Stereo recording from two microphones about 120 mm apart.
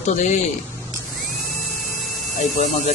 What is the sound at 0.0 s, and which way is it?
Speech, 80° left.